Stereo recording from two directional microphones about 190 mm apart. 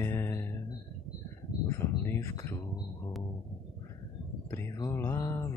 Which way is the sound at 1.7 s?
15° left (ahead or behind).